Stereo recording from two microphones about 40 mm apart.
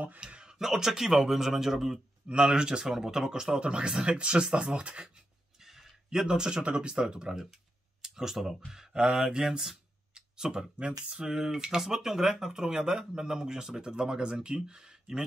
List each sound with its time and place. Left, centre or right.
0.2 s a sound: right
0.6 s speech: centre
2.2 s speech: right
5.6 s a sound: centre
6.0 s speech: centre
7.3 s speech: centre